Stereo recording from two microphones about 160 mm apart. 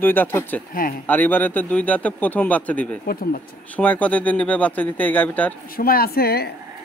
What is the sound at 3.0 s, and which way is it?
Speech, 65° left (ahead or behind).